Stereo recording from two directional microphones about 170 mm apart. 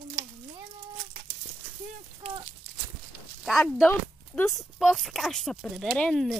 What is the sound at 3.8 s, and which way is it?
Speech, 15° left (ahead or behind).